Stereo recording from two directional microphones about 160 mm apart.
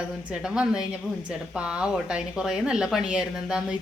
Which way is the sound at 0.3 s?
5° right (ahead or behind).